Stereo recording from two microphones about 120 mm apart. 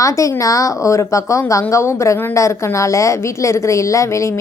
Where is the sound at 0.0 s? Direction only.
25° left (ahead or behind).